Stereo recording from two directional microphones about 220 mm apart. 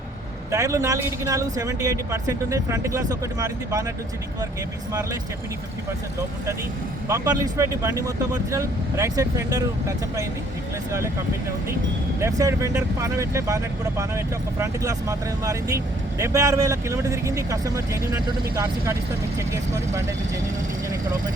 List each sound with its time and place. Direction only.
0.5 s speech: 15° right (ahead or behind)
6.1 s speech: 15° right (ahead or behind)
12.2 s speech: 15° right (ahead or behind)